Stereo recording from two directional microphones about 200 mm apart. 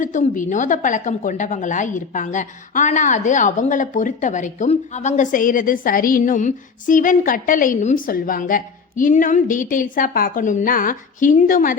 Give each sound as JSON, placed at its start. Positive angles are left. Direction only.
{"t": 0.0, "sound": "a woman's voice", "side_deg": 40}